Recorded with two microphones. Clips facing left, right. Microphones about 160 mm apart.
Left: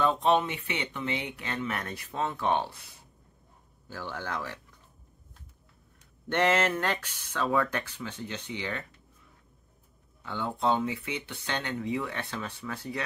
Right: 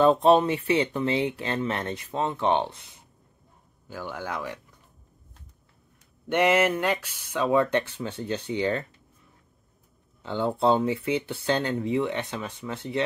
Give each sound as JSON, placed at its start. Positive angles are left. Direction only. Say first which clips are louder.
{"t": 0.0, "sound": "speech", "louder": "right 7 dB", "side_deg": -35}
{"t": 6.2, "sound": "speech", "louder": "right 4 dB", "side_deg": -10}
{"t": 7.6, "sound": "speech", "louder": "right 8 dB", "side_deg": -25}
{"t": 10.2, "sound": "speech", "louder": "right 6 dB", "side_deg": -30}